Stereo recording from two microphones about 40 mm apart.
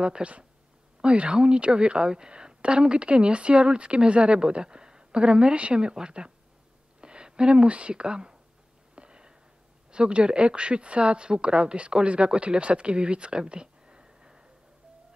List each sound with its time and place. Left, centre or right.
0.0 s speech: right
8.9 s a sound: right
9.8 s speech: right